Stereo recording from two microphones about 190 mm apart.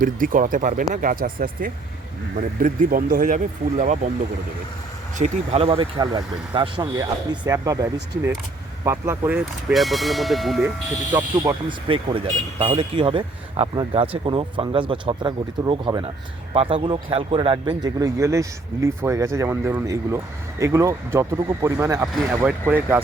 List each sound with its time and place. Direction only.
0.0 s speech: 45° right (ahead or behind)
5.1 s speech: 35° right (ahead or behind); by 10.7 s centre (ahead or behind)
11.9 s a man's voice: 30° right (ahead or behind); by 23.0 s 10° right (ahead or behind)